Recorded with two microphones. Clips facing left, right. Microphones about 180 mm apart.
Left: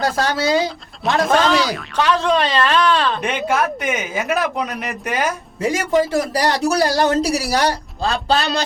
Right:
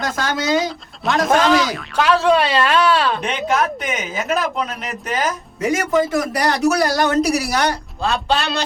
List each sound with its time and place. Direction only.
0.0 s speech: 35° left (ahead or behind)
1.0 s speech: centre (ahead or behind)
3.2 s speech: 10° left (ahead or behind)
5.5 s speech: 30° left (ahead or behind)